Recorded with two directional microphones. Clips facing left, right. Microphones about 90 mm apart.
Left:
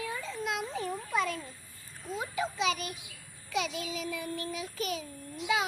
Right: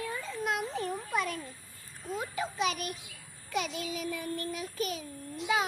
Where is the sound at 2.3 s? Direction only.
50° right (ahead or behind).